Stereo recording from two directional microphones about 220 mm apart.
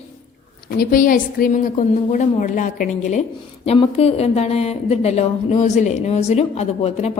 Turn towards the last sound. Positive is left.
turn(degrees=30)  # may be behind; listen again after turning